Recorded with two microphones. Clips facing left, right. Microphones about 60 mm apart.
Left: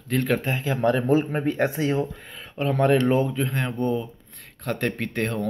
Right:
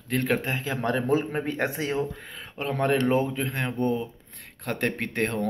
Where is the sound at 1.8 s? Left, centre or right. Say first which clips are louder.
Left 4 dB; centre.